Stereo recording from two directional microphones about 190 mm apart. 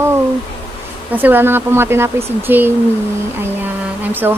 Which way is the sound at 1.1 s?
10° right (ahead or behind).